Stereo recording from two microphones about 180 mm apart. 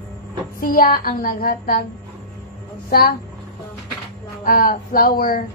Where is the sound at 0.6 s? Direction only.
55° left (ahead or behind).